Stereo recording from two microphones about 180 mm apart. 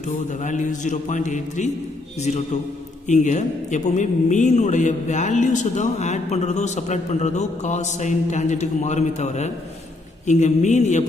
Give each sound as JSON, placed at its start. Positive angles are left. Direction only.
{"t": 0.0, "sound": "a man's voice", "side_deg": 45}